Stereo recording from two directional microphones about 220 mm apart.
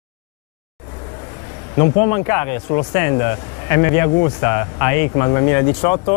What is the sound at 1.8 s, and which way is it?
Speech, 20° left (ahead or behind).